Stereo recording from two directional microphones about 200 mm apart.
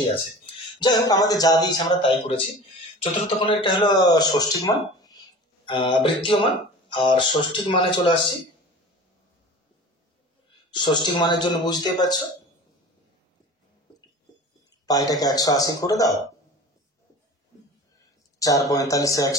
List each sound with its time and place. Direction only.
0.7 s speech: 20° left (ahead or behind)
10.7 s speech: 25° left (ahead or behind)
15.0 s a man's voice: 20° left (ahead or behind)
18.4 s a man's voice: 15° left (ahead or behind)